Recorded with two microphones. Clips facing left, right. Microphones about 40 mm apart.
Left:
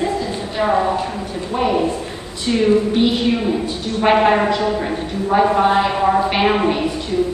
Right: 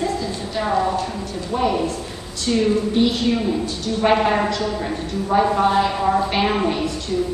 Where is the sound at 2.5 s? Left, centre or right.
Left.